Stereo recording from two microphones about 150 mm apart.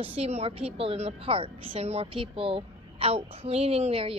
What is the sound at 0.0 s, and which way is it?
A woman's voice, 40° right (ahead or behind).